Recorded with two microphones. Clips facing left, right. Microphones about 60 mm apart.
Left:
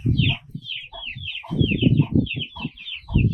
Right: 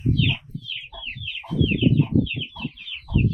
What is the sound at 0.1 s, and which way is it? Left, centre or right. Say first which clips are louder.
Chicken: even; centre.